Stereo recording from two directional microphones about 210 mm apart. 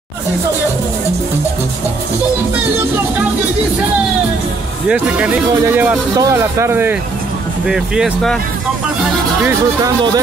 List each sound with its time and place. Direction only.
4.8 s speech: 5° right (ahead or behind)
9.5 s speech: 15° right (ahead or behind)